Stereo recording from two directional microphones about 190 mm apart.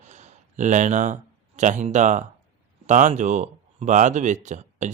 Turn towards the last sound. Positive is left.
turn(degrees=-40)  # may be behind; listen again after turning